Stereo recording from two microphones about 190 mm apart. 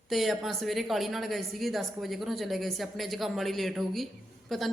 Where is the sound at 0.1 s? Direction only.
Centre (ahead or behind).